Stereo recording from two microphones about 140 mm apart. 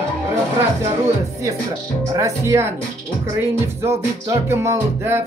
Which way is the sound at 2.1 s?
20° right (ahead or behind).